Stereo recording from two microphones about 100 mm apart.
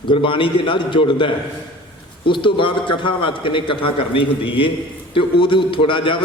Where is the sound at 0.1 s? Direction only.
60° left (ahead or behind).